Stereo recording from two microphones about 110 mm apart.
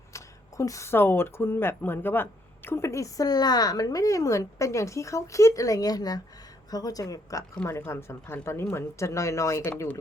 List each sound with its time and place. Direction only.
0.1 s speech: 30° left (ahead or behind)